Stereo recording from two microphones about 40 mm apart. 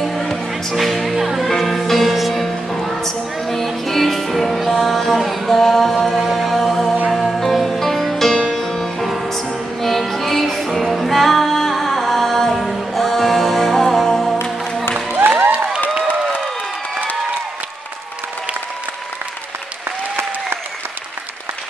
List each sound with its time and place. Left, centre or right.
0.0 s music: centre
1.5 s music: centre
5.6 s mantra: centre
7.1 s music: centre
15.3 s a sound: right